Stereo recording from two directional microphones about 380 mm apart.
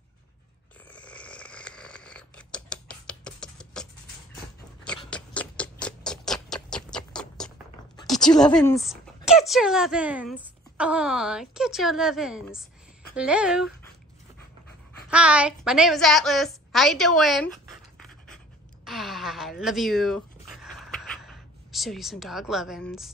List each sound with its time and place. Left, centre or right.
0.8 s snoring: centre
4.8 s a sound: centre
13.1 s a woman's voice: centre
15.0 s a woman's voice: centre
18.0 s pant: centre
18.9 s a sound: centre